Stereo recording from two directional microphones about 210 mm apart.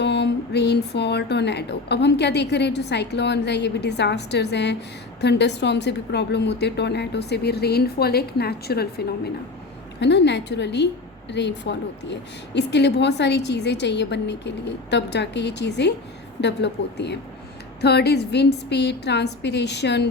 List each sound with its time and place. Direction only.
0.0 s a woman's voice: 55° left (ahead or behind)